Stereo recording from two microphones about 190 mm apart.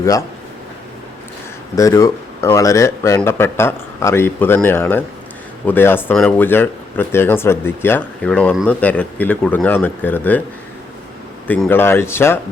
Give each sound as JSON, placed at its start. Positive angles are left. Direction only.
{"t": 1.7, "sound": "speech", "side_deg": 15}
{"t": 11.4, "sound": "speech", "side_deg": 10}